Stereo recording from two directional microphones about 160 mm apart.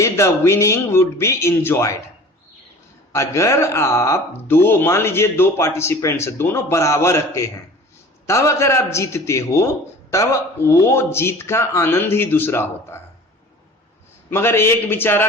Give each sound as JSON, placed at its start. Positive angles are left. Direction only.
{"t": 0.0, "sound": "speech", "side_deg": 15}
{"t": 3.1, "sound": "speech", "side_deg": 20}
{"t": 14.3, "sound": "speech", "side_deg": 15}